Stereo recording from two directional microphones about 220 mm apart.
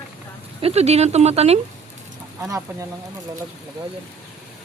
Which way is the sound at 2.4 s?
10° right (ahead or behind).